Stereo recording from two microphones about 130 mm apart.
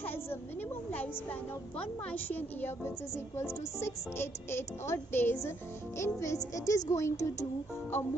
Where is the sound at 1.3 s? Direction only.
10° left (ahead or behind).